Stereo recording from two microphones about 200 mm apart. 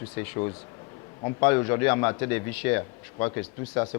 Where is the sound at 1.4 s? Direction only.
15° left (ahead or behind).